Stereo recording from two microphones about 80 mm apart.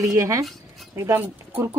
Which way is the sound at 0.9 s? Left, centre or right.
Right.